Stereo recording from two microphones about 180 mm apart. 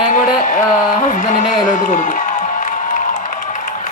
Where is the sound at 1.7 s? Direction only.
45° left (ahead or behind).